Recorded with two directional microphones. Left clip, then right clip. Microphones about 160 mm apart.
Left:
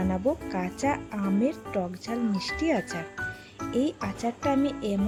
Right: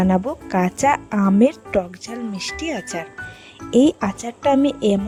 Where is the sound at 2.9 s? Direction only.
80° right.